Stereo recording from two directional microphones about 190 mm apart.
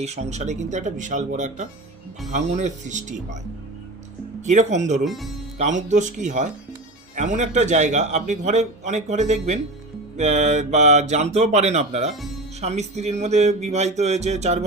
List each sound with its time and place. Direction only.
0.0 s a man's voice: 35° right (ahead or behind)
4.4 s a man's voice: 40° right (ahead or behind)
5.0 s speech: centre (ahead or behind)
5.5 s a man's voice: 40° right (ahead or behind)